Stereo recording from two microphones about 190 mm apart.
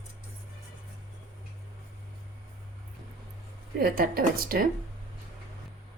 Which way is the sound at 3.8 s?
50° right (ahead or behind).